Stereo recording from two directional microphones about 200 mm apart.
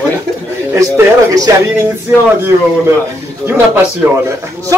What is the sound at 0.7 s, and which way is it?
Speech, 15° right (ahead or behind).